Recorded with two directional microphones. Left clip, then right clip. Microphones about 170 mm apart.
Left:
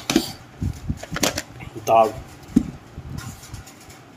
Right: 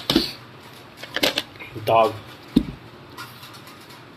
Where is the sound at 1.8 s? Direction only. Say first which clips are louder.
Left 1 dB; 10° left (ahead or behind).